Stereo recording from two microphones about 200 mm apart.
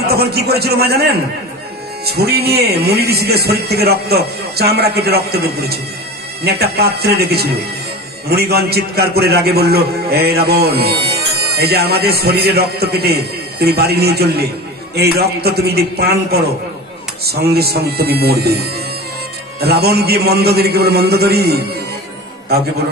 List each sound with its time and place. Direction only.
0.0 s speech: 50° right (ahead or behind)
2.0 s speech: 55° right (ahead or behind)